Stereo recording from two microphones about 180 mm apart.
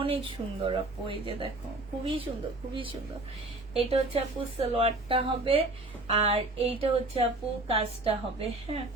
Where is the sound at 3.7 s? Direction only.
30° right (ahead or behind).